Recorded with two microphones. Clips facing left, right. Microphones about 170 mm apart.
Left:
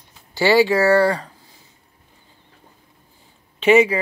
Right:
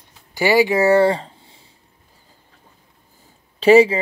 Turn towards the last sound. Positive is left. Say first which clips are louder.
# right 3 dB
turn(degrees=-35)  # may be behind; listen again after turning